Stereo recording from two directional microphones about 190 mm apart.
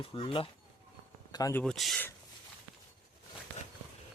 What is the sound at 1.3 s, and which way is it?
Speech, 20° left (ahead or behind).